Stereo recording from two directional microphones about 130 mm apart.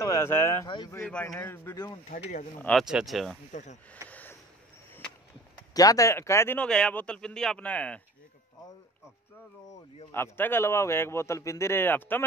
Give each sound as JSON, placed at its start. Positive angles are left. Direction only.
{"t": 0.0, "sound": "speech", "side_deg": 20}
{"t": 0.7, "sound": "speech", "side_deg": 40}
{"t": 1.2, "sound": "speech", "side_deg": 20}
{"t": 2.0, "sound": "speech", "side_deg": 60}
{"t": 2.8, "sound": "speech", "side_deg": -5}
{"t": 4.1, "sound": "a sound", "side_deg": 15}
{"t": 5.8, "sound": "speech", "side_deg": 25}
{"t": 6.6, "sound": "speech", "side_deg": 10}
{"t": 10.1, "sound": "speech", "side_deg": 15}